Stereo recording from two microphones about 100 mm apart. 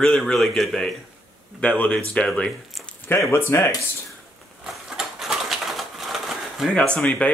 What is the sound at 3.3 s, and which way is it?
Speech, 25° left (ahead or behind).